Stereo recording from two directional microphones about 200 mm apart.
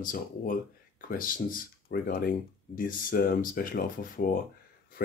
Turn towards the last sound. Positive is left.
turn(degrees=45)  # may be behind; listen again after turning